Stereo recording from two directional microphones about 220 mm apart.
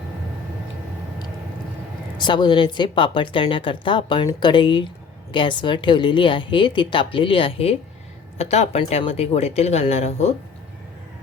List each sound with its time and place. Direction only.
2.1 s speech: 20° left (ahead or behind)